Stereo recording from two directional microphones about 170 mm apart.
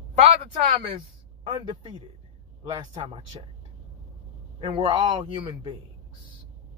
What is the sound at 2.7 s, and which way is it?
Speech, 25° right (ahead or behind).